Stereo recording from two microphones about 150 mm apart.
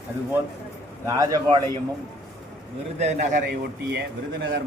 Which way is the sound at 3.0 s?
50° right (ahead or behind).